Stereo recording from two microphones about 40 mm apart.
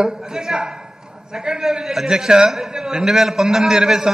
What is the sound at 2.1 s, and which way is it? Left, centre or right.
A man's voice, centre.